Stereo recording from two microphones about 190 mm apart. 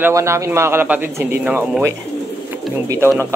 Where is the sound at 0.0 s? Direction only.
15° right (ahead or behind).